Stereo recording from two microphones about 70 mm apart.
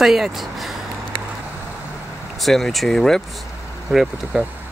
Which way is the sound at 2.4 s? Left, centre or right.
Centre.